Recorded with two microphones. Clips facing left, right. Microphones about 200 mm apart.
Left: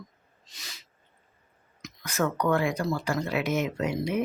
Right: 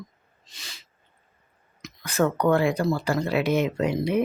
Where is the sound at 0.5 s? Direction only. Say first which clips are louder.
Right 1 dB; 30° right (ahead or behind).